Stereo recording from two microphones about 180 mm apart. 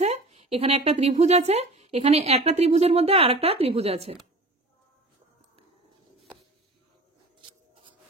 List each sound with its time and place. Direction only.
0.0 s a woman's voice: 40° right (ahead or behind)